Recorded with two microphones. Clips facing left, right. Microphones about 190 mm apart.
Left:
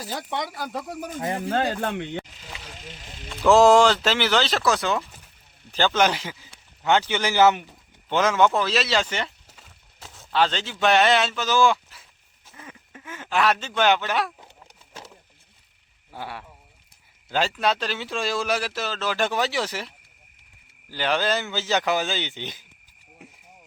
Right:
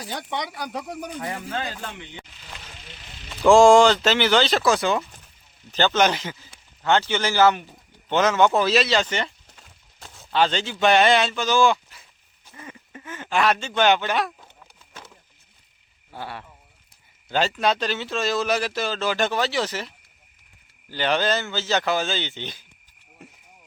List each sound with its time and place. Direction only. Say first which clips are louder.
0.0 s speech: even; 5° left (ahead or behind)
1.2 s speech: left 8 dB; 25° left (ahead or behind)
1.5 s speech: left 7 dB; 55° left (ahead or behind)
3.2 s speech: right 2 dB; 5° left (ahead or behind); by 7.6 s 20° left (ahead or behind)
8.1 s speech: right 1 dB; 5° left (ahead or behind)
8.5 s speech: right 4 dB; 10° right (ahead or behind)
8.8 s speech: right 2 dB; 5° left (ahead or behind)
16.1 s speech: even; 10° left (ahead or behind)
20.9 s speech: right 1 dB; 5° left (ahead or behind)